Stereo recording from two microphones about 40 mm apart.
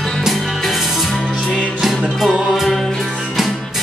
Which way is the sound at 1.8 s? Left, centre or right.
Centre.